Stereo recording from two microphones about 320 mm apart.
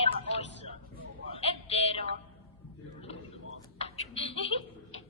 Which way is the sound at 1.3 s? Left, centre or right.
Centre.